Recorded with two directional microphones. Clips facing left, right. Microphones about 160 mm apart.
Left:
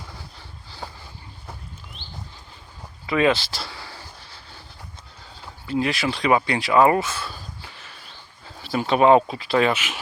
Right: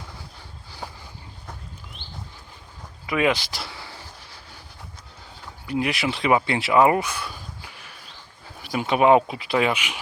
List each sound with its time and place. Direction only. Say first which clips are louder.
3.1 s speech: left 2 dB; 15° right (ahead or behind)
5.6 s speech: left 1 dB; 15° right (ahead or behind)